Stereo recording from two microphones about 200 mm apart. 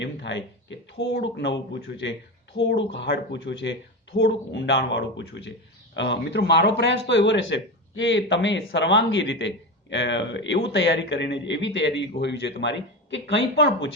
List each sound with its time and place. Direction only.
0.0 s speech: 60° left (ahead or behind)